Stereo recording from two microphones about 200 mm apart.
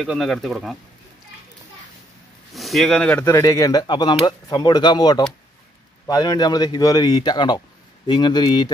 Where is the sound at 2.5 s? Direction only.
Centre (ahead or behind); by 8.7 s 20° left (ahead or behind).